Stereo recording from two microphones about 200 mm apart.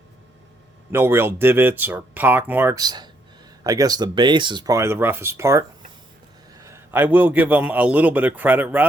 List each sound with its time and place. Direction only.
0.9 s a man's voice: 10° right (ahead or behind)